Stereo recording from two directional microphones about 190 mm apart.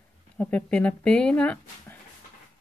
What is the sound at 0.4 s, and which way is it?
Speech, 5° left (ahead or behind).